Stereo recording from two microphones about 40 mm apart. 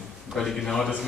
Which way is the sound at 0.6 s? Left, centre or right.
Centre.